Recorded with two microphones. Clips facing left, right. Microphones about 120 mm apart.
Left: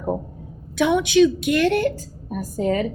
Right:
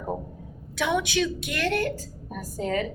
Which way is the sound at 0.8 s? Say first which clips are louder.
Left 9 dB; 20° left (ahead or behind).